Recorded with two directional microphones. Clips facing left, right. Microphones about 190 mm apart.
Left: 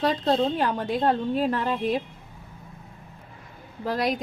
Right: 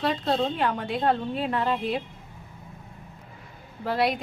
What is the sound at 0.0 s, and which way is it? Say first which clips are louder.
A woman's voice: left 3 dB; 40° left (ahead or behind).